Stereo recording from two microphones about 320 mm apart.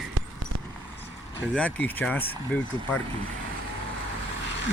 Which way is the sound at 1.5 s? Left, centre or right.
Centre.